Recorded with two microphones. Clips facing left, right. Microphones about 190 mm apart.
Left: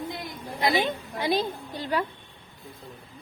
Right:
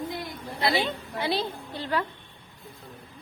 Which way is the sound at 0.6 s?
15° left (ahead or behind).